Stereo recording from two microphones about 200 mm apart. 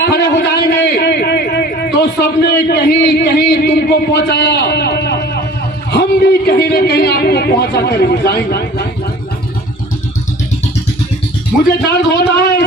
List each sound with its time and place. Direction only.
0.0 s a sound: 60° left (ahead or behind)
5.9 s speech: 55° left (ahead or behind)
12.1 s speech: 55° left (ahead or behind)